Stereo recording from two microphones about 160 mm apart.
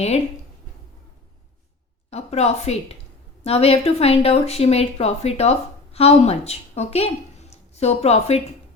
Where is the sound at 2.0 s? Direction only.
40° left (ahead or behind).